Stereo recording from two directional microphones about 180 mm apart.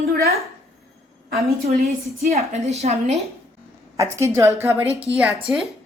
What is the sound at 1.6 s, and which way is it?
A woman's voice, 35° right (ahead or behind).